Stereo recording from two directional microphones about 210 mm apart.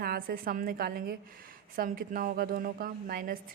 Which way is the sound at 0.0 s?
45° right (ahead or behind).